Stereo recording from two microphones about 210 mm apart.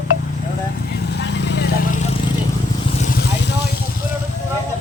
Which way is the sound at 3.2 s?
55° left (ahead or behind).